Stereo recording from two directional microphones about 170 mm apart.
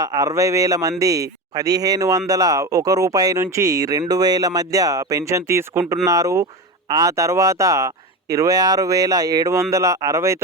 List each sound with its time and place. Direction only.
0.0 s a man's voice: 20° right (ahead or behind)